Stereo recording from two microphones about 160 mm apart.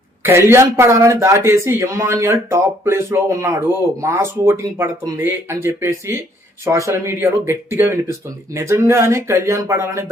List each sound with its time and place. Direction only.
0.2 s speech: 15° right (ahead or behind)